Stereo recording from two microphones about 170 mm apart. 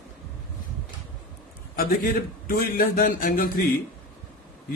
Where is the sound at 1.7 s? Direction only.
60° left (ahead or behind).